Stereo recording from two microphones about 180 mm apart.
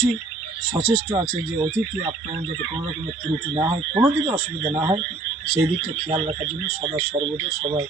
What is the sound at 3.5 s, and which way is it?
Speech, 25° right (ahead or behind).